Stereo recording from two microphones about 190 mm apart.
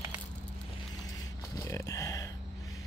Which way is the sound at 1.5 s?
15° left (ahead or behind).